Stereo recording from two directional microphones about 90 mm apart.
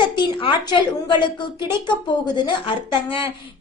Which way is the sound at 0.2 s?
60° left (ahead or behind).